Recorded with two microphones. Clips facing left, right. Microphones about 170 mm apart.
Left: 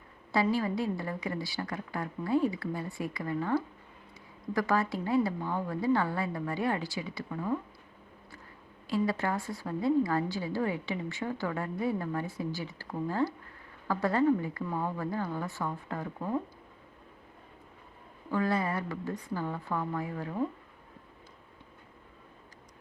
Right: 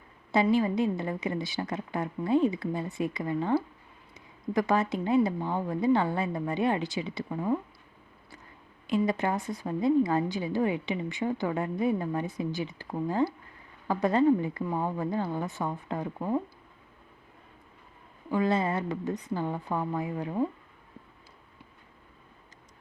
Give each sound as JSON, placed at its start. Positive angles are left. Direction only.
{"t": 0.4, "sound": "a woman's voice", "side_deg": -20}
{"t": 8.9, "sound": "a woman's voice", "side_deg": -20}
{"t": 18.3, "sound": "a woman's voice", "side_deg": -20}